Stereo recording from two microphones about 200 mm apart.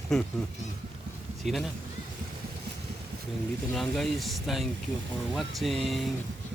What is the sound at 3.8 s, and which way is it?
Speech, centre (ahead or behind).